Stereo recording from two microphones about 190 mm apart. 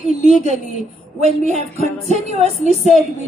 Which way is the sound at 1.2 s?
35° right (ahead or behind).